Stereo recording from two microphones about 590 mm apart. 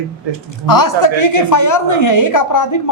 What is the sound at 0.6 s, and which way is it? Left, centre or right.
A woman's voice, left.